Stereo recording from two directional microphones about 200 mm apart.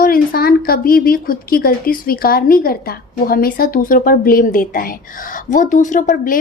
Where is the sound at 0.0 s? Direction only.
45° left (ahead or behind).